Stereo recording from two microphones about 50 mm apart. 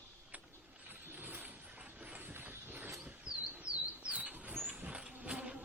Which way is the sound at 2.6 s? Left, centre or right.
Right.